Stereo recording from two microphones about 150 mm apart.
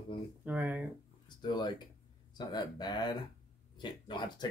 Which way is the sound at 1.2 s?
30° left (ahead or behind).